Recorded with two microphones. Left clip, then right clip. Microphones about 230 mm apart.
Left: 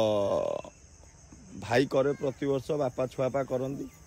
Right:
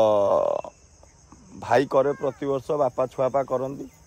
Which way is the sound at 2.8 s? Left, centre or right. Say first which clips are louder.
Right 7 dB; right.